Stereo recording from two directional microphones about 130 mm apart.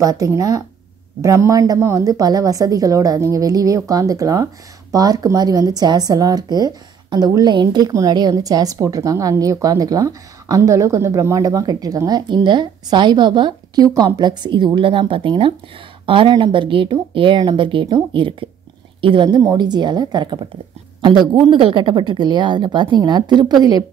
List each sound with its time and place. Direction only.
0.0 s a woman's voice: 25° right (ahead or behind)